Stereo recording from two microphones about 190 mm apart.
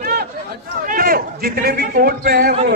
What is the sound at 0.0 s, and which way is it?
Chatter, 50° right (ahead or behind).